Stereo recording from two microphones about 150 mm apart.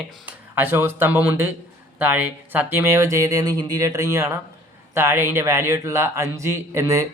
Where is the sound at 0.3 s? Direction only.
15° right (ahead or behind).